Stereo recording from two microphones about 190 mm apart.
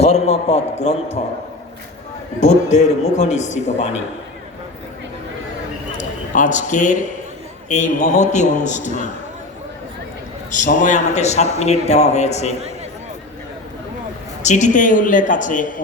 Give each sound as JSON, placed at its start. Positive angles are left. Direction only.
{"t": 0.0, "sound": "a man's voice", "side_deg": 35}
{"t": 2.4, "sound": "a man's voice", "side_deg": 35}
{"t": 6.0, "sound": "a man's voice", "side_deg": 40}
{"t": 10.5, "sound": "a man's voice", "side_deg": 40}
{"t": 14.4, "sound": "a man's voice", "side_deg": 40}